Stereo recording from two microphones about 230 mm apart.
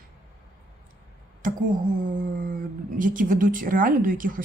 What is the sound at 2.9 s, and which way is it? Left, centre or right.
A woman's voice, right.